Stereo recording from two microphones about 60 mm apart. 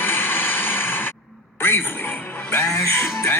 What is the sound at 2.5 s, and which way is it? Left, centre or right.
Music, left.